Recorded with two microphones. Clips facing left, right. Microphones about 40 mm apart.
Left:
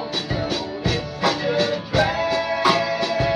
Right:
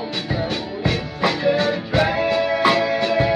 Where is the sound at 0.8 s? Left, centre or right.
Right.